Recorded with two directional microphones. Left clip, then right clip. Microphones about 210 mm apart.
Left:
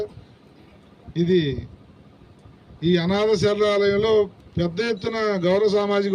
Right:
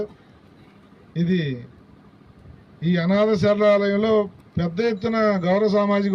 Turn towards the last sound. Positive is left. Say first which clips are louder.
# even
turn(degrees=50)  # may be behind; listen again after turning